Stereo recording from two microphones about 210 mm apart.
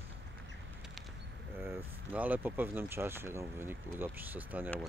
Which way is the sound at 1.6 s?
10° right (ahead or behind).